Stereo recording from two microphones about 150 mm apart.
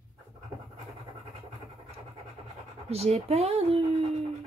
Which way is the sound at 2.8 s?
45° right (ahead or behind).